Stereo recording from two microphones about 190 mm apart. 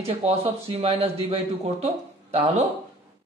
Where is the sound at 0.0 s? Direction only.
35° right (ahead or behind).